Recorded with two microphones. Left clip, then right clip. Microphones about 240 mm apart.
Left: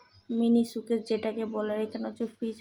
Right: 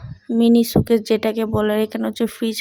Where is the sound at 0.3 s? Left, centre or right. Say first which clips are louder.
Right 11 dB; right.